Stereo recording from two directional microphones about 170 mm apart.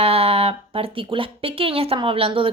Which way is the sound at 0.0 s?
35° right (ahead or behind).